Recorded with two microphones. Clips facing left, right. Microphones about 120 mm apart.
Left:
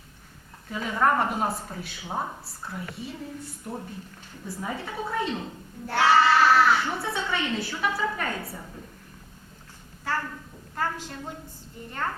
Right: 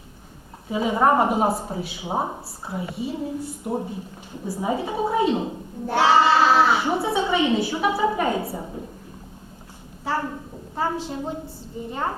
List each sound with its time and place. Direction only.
0.7 s speech: 20° right (ahead or behind)
10.0 s a sound: 15° right (ahead or behind)
10.8 s a woman's voice: 15° right (ahead or behind)